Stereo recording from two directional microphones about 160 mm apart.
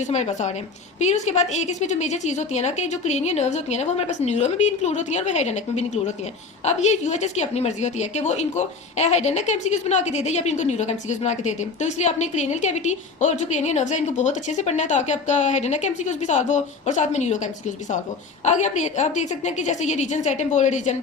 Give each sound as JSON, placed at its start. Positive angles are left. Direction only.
{"t": 0.1, "sound": "a woman's voice", "side_deg": 45}